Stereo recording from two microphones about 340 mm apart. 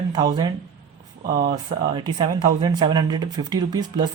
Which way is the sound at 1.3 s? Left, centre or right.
Right.